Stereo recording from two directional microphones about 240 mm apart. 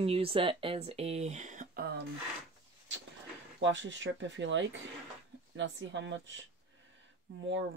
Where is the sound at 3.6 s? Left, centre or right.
Right.